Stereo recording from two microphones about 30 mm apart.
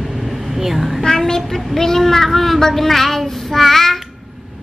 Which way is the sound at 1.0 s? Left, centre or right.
Centre.